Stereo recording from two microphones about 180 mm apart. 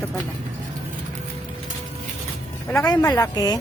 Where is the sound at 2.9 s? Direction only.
20° left (ahead or behind).